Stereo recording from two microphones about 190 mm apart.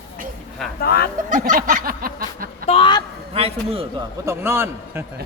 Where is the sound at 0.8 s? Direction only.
55° left (ahead or behind).